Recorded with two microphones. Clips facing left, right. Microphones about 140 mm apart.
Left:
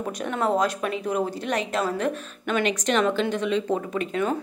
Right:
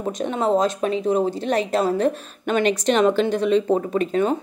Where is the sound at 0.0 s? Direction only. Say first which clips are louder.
Right 3 dB; 25° right (ahead or behind).